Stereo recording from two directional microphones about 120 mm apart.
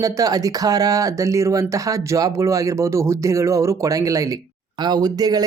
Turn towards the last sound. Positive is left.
turn(degrees=-30)  # may be behind; listen again after turning